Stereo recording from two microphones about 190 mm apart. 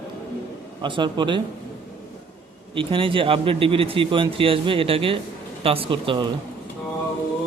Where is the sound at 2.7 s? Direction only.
25° right (ahead or behind).